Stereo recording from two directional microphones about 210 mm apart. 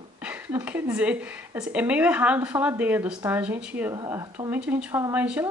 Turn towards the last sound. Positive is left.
turn(degrees=-5)  # may be behind; listen again after turning